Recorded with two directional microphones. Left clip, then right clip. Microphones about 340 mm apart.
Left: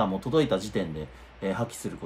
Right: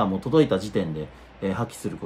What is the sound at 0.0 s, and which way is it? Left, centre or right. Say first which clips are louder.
Speech: right 4 dB; centre.